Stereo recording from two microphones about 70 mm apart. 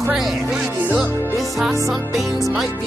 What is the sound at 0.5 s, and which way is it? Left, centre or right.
Music, centre.